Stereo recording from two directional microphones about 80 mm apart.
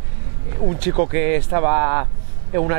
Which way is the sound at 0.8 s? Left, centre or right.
Centre.